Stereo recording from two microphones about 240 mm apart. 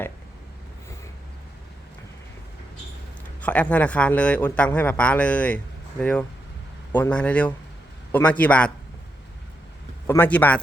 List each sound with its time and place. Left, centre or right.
3.4 s a man's voice: centre
10.1 s a man's voice: centre